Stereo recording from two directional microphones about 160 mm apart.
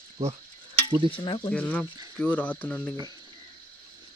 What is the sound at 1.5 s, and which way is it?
Speech, 10° left (ahead or behind).